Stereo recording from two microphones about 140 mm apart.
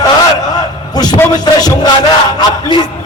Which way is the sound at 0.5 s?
30° left (ahead or behind).